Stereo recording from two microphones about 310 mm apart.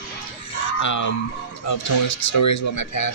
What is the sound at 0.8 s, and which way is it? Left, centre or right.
Speech, left.